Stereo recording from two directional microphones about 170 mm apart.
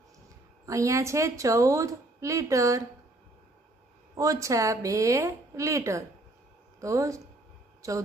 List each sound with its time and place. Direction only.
0.7 s a woman's voice: 20° right (ahead or behind)
4.2 s a woman's voice: 20° right (ahead or behind)